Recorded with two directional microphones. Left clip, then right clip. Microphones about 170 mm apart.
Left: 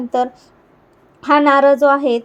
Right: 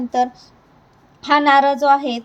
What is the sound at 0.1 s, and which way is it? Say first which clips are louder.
A woman's voice: left 1 dB; 15° left (ahead or behind).